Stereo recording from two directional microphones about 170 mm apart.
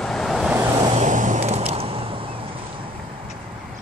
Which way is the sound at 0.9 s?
45° right (ahead or behind).